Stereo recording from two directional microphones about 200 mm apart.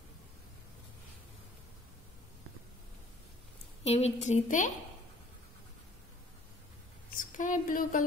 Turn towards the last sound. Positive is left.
turn(degrees=45)  # may be behind; listen again after turning